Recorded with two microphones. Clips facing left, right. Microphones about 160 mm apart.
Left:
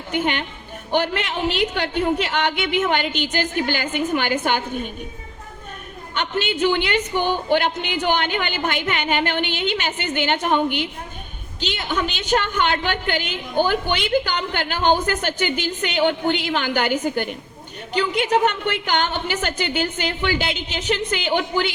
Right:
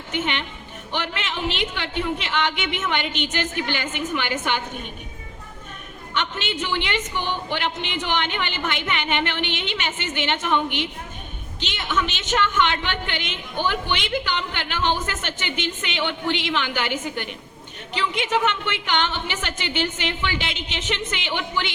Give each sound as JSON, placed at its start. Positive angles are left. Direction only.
{"t": 0.1, "sound": "a woman's voice", "side_deg": 40}
{"t": 6.1, "sound": "a woman's voice", "side_deg": 40}